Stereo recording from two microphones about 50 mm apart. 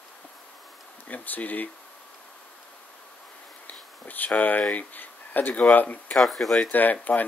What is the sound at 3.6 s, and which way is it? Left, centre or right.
Speech, left.